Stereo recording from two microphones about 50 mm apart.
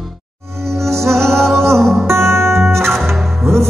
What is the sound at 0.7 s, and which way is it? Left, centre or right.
Music, right.